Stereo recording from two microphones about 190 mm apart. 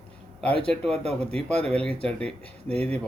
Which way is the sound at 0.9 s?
30° right (ahead or behind).